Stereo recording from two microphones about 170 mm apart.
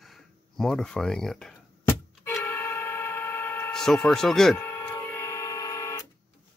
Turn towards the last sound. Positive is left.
turn(degrees=20)  # may be behind; listen again after turning